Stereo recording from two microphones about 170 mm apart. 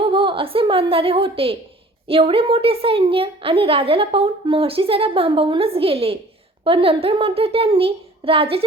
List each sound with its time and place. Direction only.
0.0 s a woman's voice: 30° right (ahead or behind)